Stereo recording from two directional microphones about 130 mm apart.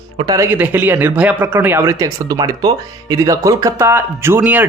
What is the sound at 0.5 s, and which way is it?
A man's voice, 15° right (ahead or behind).